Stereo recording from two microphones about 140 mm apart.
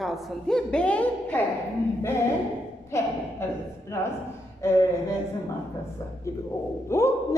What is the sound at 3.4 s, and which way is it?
Speech, 20° left (ahead or behind).